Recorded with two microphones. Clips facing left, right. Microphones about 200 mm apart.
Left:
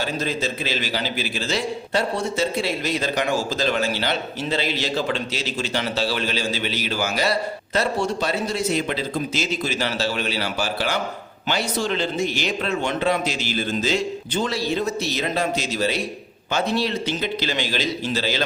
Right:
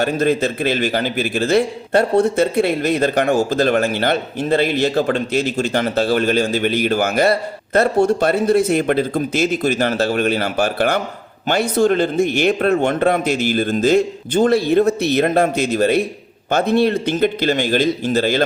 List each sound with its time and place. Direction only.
0.0 s a man's voice: 55° right (ahead or behind)